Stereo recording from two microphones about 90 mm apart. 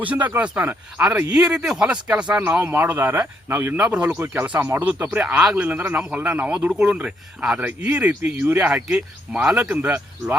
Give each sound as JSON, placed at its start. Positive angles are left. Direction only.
{"t": 0.0, "sound": "speech", "side_deg": -15}
{"t": 5.4, "sound": "speech", "side_deg": -5}
{"t": 5.6, "sound": "speech", "side_deg": -20}